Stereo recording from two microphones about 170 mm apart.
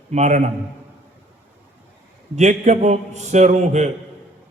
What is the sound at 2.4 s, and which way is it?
A man's voice, 40° right (ahead or behind).